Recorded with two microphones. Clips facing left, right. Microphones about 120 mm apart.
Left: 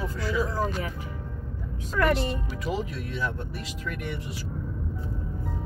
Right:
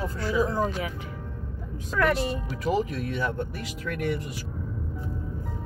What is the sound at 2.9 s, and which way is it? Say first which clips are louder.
Speech: right 3 dB; 60° right (ahead or behind).